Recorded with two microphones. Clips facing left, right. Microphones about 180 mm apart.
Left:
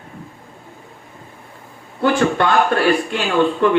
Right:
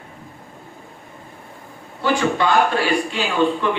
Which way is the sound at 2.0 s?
55° left (ahead or behind).